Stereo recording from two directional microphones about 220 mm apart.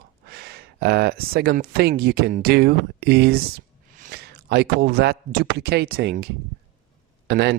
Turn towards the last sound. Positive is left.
turn(degrees=-50)  # may be behind; listen again after turning